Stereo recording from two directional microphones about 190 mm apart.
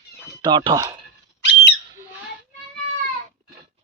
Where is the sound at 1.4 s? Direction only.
70° left (ahead or behind).